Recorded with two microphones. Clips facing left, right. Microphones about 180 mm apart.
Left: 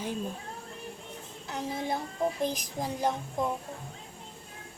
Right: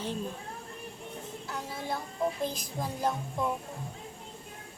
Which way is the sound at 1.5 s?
20° left (ahead or behind).